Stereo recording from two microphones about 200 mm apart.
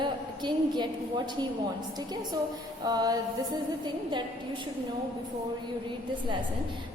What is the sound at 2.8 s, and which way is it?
Speech, 20° right (ahead or behind).